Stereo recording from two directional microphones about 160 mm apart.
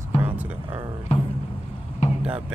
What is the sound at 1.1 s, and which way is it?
Music, 45° left (ahead or behind).